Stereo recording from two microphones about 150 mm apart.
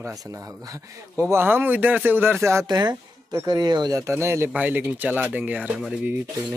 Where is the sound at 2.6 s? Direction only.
30° right (ahead or behind); by 6.5 s 15° right (ahead or behind).